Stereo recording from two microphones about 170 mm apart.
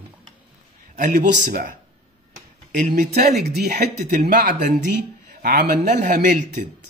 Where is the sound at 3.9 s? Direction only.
45° right (ahead or behind).